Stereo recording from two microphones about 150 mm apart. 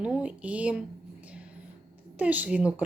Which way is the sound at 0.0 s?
5° right (ahead or behind).